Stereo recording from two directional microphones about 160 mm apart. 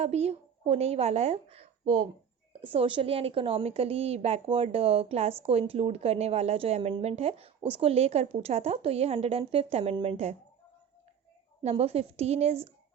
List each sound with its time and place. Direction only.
0.0 s a woman's voice: 40° right (ahead or behind)
11.6 s a woman's voice: 40° right (ahead or behind)